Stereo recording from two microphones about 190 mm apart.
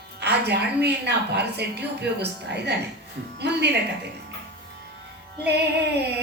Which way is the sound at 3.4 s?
60° right (ahead or behind).